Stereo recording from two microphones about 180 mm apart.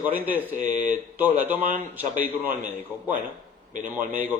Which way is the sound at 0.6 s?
45° right (ahead or behind).